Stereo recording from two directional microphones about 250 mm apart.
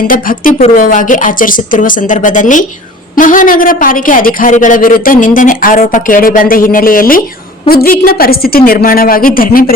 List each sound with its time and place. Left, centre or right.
0.1 s a woman's voice: left